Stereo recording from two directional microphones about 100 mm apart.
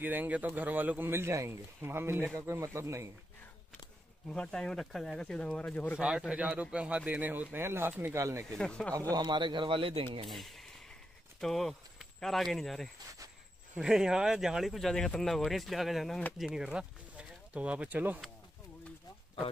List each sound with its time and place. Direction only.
0.0 s a man's voice: 20° right (ahead or behind)
4.3 s speech: 10° left (ahead or behind)
5.9 s a man's voice: 10° right (ahead or behind); by 8.5 s 30° right (ahead or behind)
8.5 s speech: 10° left (ahead or behind)
9.1 s speech: 45° right (ahead or behind); by 10.0 s 60° right (ahead or behind)
10.2 s speech: centre (ahead or behind); by 18.2 s 15° right (ahead or behind)